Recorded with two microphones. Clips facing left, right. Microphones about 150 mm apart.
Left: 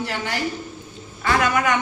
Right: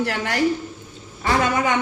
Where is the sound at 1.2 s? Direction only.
30° right (ahead or behind).